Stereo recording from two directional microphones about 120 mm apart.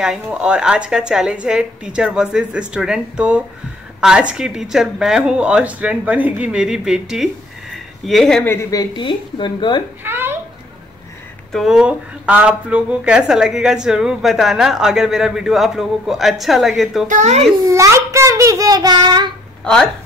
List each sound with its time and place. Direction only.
0.0 s a woman's voice: 5° right (ahead or behind)
7.7 s a sound: centre (ahead or behind)
8.5 s a woman's voice: 25° left (ahead or behind)
8.9 s speech: 40° left (ahead or behind)
10.0 s a sound: 20° right (ahead or behind)
11.5 s speech: 5° right (ahead or behind)
17.1 s a child's voice: 70° right (ahead or behind)
17.6 s a child's voice: 25° right (ahead or behind)
19.6 s speech: 5° left (ahead or behind)